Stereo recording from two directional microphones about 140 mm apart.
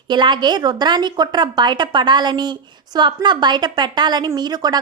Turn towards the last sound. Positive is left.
turn(degrees=-30)  # may be behind; listen again after turning